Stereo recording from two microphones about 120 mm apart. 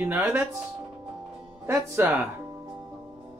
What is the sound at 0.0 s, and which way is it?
Speech, 15° right (ahead or behind).